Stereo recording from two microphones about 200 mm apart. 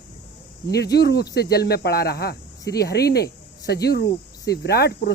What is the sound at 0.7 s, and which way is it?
Speech, 55° left (ahead or behind).